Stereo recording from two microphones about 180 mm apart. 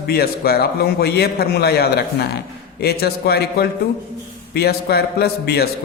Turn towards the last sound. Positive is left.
turn(degrees=60)  # may be behind; listen again after turning